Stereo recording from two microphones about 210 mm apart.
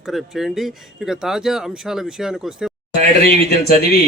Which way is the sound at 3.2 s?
45° left (ahead or behind).